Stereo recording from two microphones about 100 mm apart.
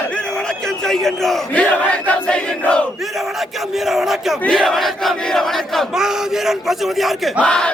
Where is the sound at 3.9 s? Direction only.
5° right (ahead or behind).